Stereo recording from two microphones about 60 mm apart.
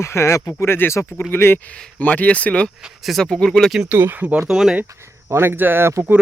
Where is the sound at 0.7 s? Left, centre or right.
Left.